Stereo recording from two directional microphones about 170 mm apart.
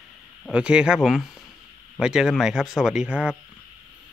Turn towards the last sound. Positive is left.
turn(degrees=-5)  # may be behind; listen again after turning